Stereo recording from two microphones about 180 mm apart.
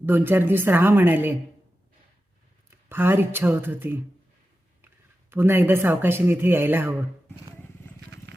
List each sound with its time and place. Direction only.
0.0 s speech: 10° right (ahead or behind)
2.9 s speech: 10° right (ahead or behind)
5.3 s speech: 10° right (ahead or behind)
8.3 s a sound: 75° right (ahead or behind)